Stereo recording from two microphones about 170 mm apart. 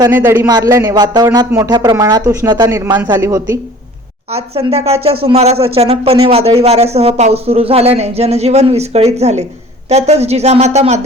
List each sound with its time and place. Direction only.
0.0 s speech: 15° right (ahead or behind)
4.3 s speech: 35° right (ahead or behind)